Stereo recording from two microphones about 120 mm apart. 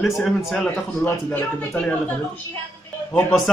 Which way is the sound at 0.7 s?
15° left (ahead or behind).